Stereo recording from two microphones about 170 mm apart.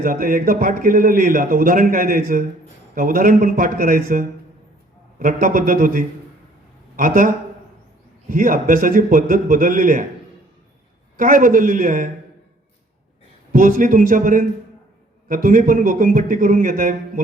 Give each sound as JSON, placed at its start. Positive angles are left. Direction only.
{"t": 0.0, "sound": "a man's voice", "side_deg": -55}
{"t": 11.2, "sound": "a man's voice", "side_deg": -55}
{"t": 13.5, "sound": "a man's voice", "side_deg": -55}